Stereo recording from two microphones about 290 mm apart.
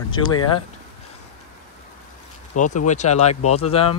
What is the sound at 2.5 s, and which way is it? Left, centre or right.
Speech, left.